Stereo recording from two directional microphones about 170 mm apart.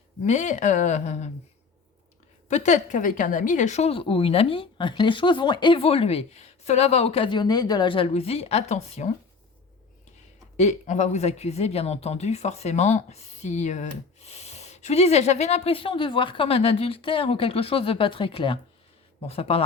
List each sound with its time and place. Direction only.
0.3 s a woman's voice: 45° left (ahead or behind)
2.5 s speech: 45° left (ahead or behind)
10.6 s speech: 45° left (ahead or behind)